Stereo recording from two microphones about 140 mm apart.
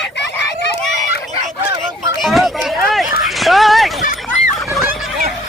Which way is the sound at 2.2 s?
Centre (ahead or behind).